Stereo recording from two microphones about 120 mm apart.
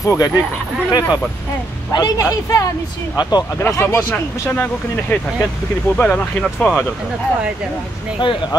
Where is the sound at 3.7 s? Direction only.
25° left (ahead or behind); by 6.8 s 10° left (ahead or behind).